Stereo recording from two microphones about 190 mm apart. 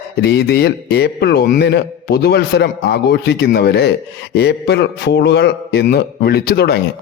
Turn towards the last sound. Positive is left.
turn(degrees=55)  # may be behind; listen again after turning